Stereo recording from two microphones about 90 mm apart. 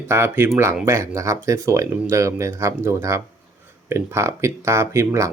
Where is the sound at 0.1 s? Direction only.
25° right (ahead or behind).